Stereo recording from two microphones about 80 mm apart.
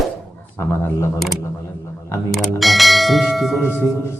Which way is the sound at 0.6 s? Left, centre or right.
Left.